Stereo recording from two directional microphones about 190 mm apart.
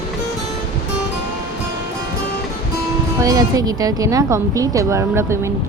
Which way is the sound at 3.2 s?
20° right (ahead or behind).